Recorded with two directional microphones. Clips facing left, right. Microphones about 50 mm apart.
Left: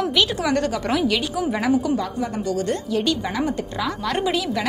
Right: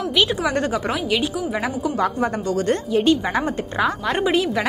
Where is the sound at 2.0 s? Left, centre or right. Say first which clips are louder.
Right 4 dB; right.